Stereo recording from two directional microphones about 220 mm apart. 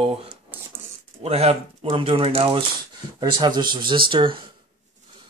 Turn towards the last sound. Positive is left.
turn(degrees=-20)  # may be behind; listen again after turning